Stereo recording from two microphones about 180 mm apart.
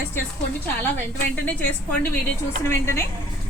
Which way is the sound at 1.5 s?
10° left (ahead or behind).